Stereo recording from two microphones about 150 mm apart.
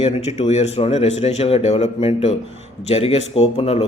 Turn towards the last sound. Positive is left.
turn(degrees=45)  # may be behind; listen again after turning